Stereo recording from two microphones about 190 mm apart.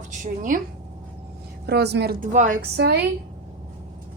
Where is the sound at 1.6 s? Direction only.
60° right (ahead or behind).